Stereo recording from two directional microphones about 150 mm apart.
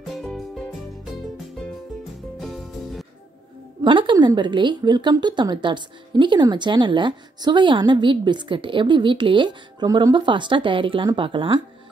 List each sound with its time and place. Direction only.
0.0 s music: centre (ahead or behind)
2.4 s music: centre (ahead or behind)
3.8 s a woman's voice: 35° right (ahead or behind)